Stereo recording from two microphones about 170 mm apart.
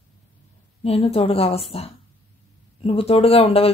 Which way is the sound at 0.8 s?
35° left (ahead or behind).